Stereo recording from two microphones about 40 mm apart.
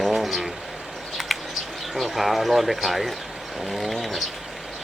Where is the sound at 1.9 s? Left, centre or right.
Centre.